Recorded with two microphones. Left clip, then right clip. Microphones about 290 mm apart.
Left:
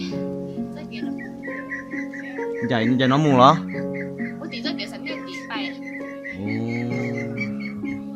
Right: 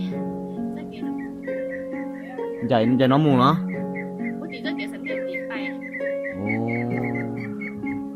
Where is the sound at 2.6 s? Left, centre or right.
Centre.